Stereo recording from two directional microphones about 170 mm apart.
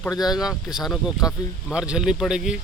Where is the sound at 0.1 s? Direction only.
25° left (ahead or behind).